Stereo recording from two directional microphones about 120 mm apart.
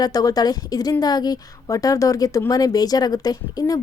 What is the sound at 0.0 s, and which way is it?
A woman's voice, 30° left (ahead or behind).